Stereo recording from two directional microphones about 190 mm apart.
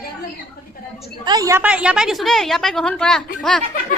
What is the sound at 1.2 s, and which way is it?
A woman's voice, 20° right (ahead or behind).